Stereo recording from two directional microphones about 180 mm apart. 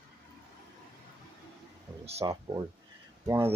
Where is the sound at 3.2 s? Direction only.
15° right (ahead or behind).